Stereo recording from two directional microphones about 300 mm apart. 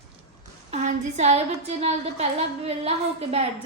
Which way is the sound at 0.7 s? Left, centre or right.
Right.